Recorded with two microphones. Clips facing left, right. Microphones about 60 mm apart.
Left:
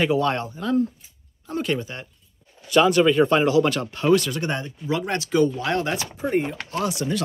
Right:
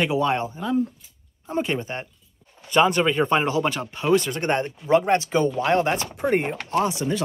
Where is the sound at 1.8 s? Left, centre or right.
Right; by 4.2 s centre.